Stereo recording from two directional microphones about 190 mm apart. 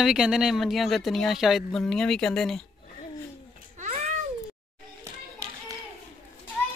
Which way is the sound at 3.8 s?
35° right (ahead or behind).